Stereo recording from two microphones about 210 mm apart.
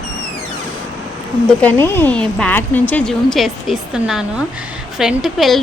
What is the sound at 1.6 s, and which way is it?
A woman's voice, 10° left (ahead or behind).